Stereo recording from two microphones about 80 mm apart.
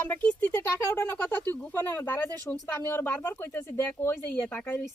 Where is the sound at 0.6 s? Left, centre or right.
Left.